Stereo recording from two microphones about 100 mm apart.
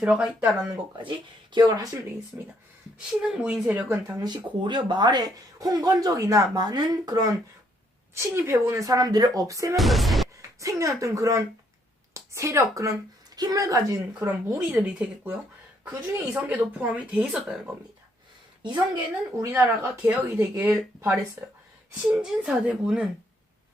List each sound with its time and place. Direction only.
0.0 s speech: 10° right (ahead or behind)
1.5 s speech: 40° right (ahead or behind)
3.1 s speech: 5° right (ahead or behind)
4.2 s speech: 45° right (ahead or behind)
8.1 s speech: 25° right (ahead or behind)
9.7 s music: centre (ahead or behind)
10.6 s speech: 30° right (ahead or behind)
14.3 s speech: 15° right (ahead or behind)
16.4 s speech: 15° right (ahead or behind)
18.6 s a woman's voice: 50° right (ahead or behind)
19.5 s speech: 20° right (ahead or behind)
22.2 s speech: 10° right (ahead or behind)